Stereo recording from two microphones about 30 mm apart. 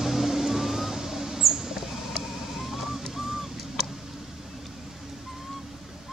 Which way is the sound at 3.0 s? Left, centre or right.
Centre.